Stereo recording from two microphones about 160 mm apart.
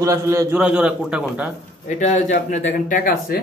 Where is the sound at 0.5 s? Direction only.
5° right (ahead or behind).